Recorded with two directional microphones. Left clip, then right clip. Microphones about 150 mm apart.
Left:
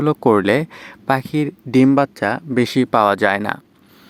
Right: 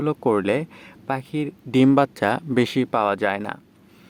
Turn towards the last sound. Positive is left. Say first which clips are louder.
# left 6 dB
turn(degrees=25)  # may be behind; listen again after turning